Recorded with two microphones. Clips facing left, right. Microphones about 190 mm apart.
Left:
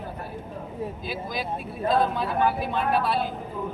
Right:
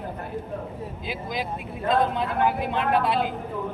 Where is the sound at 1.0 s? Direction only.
20° right (ahead or behind).